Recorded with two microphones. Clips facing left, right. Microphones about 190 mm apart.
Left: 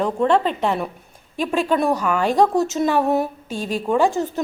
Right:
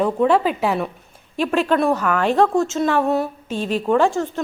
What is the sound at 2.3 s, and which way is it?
Speech, 15° left (ahead or behind).